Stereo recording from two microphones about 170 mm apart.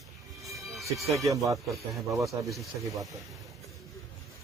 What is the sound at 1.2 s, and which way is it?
Speech, 20° right (ahead or behind).